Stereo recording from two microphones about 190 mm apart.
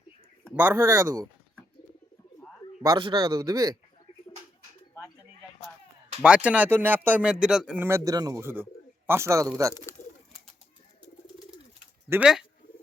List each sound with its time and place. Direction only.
0.5 s speech: 10° right (ahead or behind)
2.8 s speech: 20° right (ahead or behind)
6.2 s speech: 5° right (ahead or behind)
9.9 s bird: 15° left (ahead or behind)
12.0 s speech: 10° right (ahead or behind)